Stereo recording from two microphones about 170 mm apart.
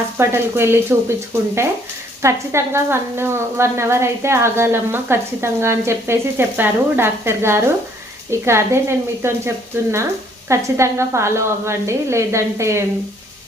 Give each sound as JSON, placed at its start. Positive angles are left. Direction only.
{"t": 0.2, "sound": "a woman's voice", "side_deg": -15}
{"t": 10.5, "sound": "a woman's voice", "side_deg": -15}